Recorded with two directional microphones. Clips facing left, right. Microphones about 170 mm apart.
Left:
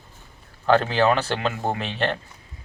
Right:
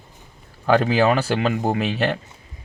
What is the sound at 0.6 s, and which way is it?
Speech, 10° right (ahead or behind).